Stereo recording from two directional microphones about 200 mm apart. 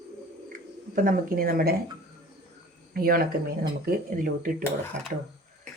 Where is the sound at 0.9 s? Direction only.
45° right (ahead or behind).